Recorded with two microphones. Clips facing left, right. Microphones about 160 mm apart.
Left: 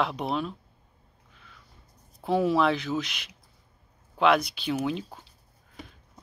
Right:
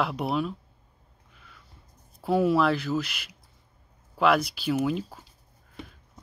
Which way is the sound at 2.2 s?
Centre (ahead or behind).